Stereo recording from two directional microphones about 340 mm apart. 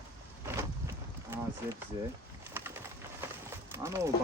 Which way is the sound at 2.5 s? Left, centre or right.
Centre.